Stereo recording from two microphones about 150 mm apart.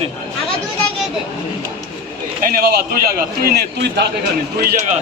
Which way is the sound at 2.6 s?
90° right.